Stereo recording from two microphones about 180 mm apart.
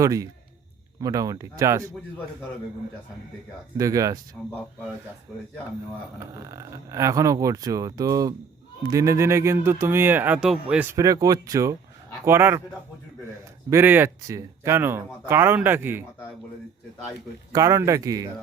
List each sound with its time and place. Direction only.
0.0 s speech: 20° right (ahead or behind)
3.8 s speech: 20° right (ahead or behind)
6.4 s speech: 15° right (ahead or behind)
13.7 s speech: 10° right (ahead or behind)
17.5 s speech: 15° right (ahead or behind)